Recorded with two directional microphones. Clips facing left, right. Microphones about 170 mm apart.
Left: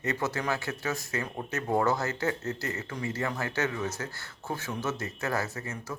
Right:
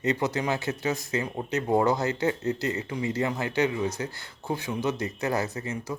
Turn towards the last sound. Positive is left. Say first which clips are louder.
# right 5 dB
turn(degrees=-15)  # may be behind; listen again after turning